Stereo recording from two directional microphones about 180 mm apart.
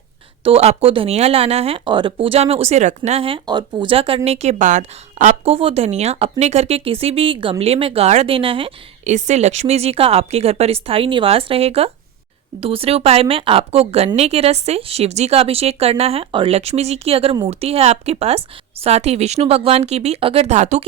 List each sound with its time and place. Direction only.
0.4 s speech: 35° right (ahead or behind)